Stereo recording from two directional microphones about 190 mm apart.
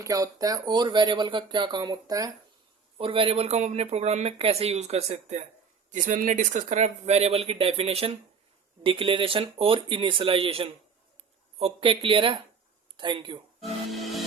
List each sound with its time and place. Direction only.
0.0 s speech: 20° right (ahead or behind)
13.6 s music: centre (ahead or behind)